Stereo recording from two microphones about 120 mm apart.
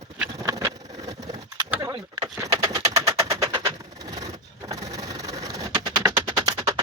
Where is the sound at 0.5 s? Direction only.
25° right (ahead or behind).